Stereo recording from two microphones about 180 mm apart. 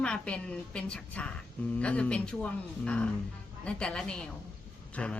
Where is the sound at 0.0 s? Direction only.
5° left (ahead or behind).